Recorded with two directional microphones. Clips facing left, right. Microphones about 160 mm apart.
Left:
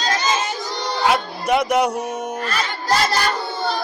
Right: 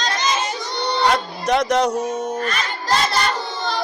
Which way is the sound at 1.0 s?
5° left (ahead or behind).